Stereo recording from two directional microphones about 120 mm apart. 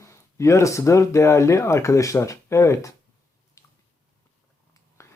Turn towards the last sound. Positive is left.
turn(degrees=25)  # may be behind; listen again after turning